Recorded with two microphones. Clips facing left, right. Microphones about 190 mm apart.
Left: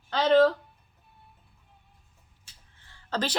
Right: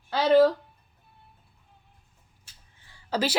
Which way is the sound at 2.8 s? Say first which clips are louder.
Right 3 dB; 10° right (ahead or behind).